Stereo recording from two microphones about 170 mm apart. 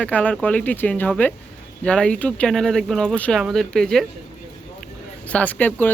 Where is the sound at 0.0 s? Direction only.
10° left (ahead or behind).